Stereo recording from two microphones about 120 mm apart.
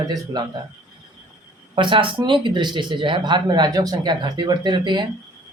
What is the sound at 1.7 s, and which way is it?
Speech, 45° right (ahead or behind).